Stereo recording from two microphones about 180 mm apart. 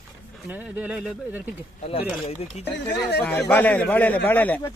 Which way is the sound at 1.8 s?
35° left (ahead or behind).